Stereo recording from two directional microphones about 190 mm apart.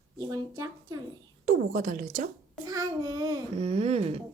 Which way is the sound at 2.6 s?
20° right (ahead or behind).